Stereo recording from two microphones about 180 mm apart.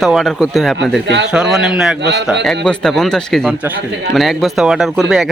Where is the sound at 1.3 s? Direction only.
5° right (ahead or behind).